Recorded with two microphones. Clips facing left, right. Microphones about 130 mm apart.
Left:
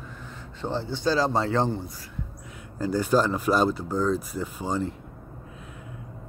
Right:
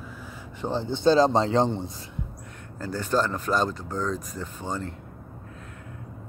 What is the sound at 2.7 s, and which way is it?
Speech, 10° left (ahead or behind).